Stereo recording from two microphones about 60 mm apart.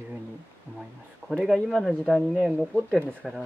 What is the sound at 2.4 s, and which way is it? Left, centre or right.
Speech, centre.